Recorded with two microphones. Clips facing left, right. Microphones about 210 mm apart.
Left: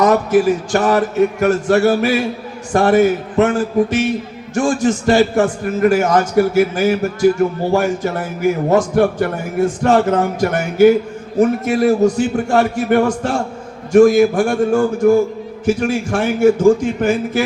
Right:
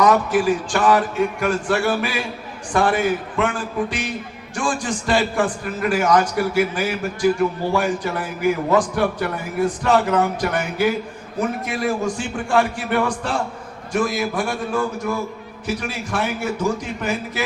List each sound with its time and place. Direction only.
0.0 s a man's voice: 40° left (ahead or behind)